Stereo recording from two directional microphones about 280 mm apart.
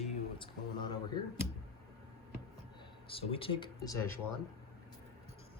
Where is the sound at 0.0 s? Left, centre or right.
Centre.